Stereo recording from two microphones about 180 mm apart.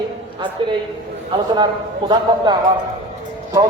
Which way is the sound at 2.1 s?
25° right (ahead or behind).